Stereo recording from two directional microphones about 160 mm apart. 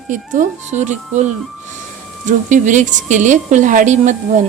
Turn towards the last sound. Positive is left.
turn(degrees=-50)  # may be behind; listen again after turning